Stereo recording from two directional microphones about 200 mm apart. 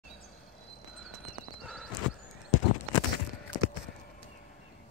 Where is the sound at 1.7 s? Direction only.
Centre (ahead or behind).